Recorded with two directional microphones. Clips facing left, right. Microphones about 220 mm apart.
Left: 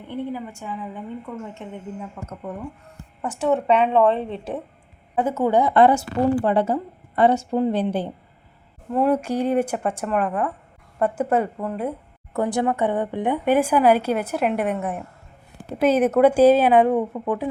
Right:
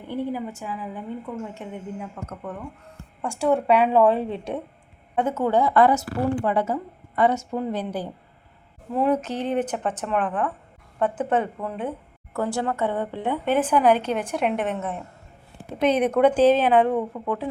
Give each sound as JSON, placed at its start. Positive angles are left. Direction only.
{"t": 0.5, "sound": "a woman's voice", "side_deg": -5}
{"t": 3.2, "sound": "a woman's voice", "side_deg": 5}
{"t": 8.9, "sound": "a woman's voice", "side_deg": 5}
{"t": 12.3, "sound": "a woman's voice", "side_deg": 20}